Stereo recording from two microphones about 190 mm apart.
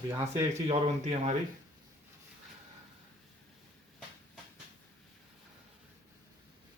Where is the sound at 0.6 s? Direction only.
35° right (ahead or behind).